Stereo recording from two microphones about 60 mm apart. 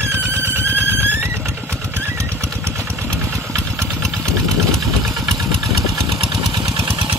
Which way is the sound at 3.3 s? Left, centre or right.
Right.